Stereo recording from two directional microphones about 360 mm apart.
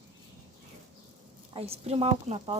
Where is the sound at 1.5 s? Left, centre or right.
Centre.